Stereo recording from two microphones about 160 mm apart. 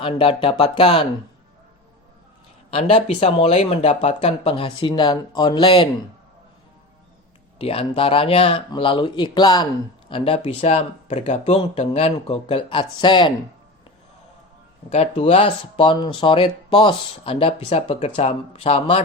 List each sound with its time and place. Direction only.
0.0 s speech: 35° left (ahead or behind)
2.6 s speech: 35° left (ahead or behind)
7.6 s speech: 35° left (ahead or behind)
14.8 s speech: 40° left (ahead or behind)